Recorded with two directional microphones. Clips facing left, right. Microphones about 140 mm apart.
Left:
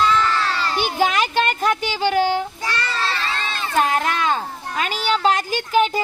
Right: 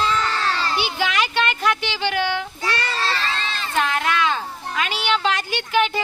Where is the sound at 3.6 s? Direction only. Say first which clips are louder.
Left 3 dB; 45° left (ahead or behind).